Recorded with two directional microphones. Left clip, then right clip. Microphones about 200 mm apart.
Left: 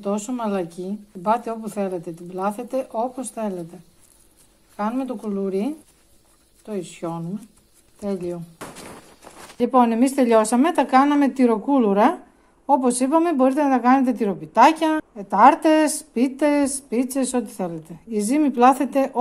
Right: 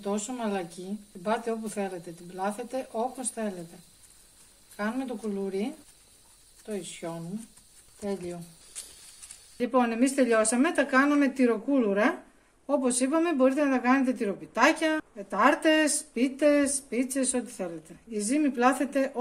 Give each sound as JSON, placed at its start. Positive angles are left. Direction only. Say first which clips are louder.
{"t": 0.0, "sound": "speech", "louder": "left 6 dB", "side_deg": 35}
{"t": 4.7, "sound": "speech", "louder": "left 7 dB", "side_deg": 30}
{"t": 9.6, "sound": "speech", "louder": "left 8 dB", "side_deg": 35}